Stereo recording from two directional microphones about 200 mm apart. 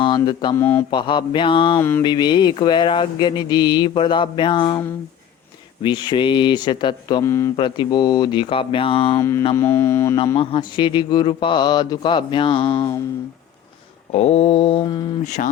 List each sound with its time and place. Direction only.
0.0 s mantra: 20° left (ahead or behind)
0.6 s speech: 10° left (ahead or behind)
0.9 s speech: 25° left (ahead or behind)
1.8 s speech: 10° left (ahead or behind)
2.0 s speech: 20° left (ahead or behind)
5.8 s speech: 20° left (ahead or behind)
7.5 s speech: 25° left (ahead or behind)
9.1 s speech: 15° left (ahead or behind)
10.3 s speech: 25° left (ahead or behind)
14.1 s speech: 30° left (ahead or behind)
15.2 s speech: 35° left (ahead or behind)